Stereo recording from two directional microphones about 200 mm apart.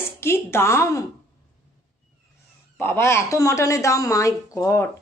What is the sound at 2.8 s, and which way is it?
Speech, 10° left (ahead or behind).